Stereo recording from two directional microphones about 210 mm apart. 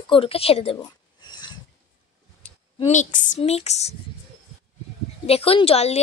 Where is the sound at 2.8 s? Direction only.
35° left (ahead or behind).